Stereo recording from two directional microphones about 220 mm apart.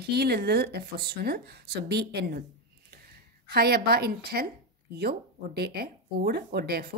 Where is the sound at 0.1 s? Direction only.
45° right (ahead or behind).